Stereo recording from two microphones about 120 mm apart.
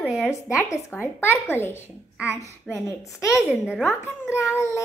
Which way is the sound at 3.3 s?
Centre (ahead or behind).